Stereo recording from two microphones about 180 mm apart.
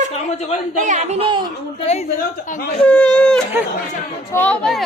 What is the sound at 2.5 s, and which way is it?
Speech, 55° left (ahead or behind).